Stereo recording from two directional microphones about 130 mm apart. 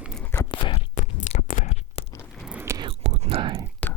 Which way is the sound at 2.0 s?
50° left (ahead or behind).